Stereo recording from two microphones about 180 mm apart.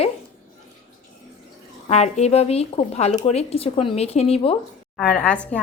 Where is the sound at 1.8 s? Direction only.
35° left (ahead or behind).